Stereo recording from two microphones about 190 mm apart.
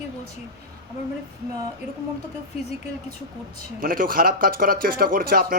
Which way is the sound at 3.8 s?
50° right (ahead or behind).